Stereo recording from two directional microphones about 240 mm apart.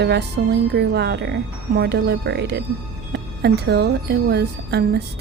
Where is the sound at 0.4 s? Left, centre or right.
Right.